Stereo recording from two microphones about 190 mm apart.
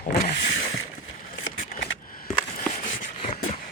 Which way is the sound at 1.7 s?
45° left (ahead or behind).